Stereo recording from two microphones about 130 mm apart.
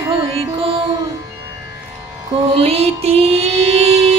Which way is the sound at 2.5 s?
50° right (ahead or behind).